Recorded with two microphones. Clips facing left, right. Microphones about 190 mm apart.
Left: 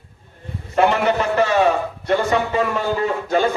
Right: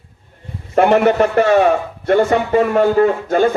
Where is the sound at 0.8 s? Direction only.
55° right (ahead or behind).